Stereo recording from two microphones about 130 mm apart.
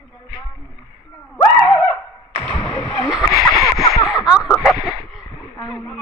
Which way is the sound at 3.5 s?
25° left (ahead or behind).